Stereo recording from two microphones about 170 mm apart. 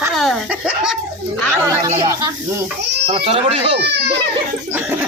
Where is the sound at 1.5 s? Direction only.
15° right (ahead or behind).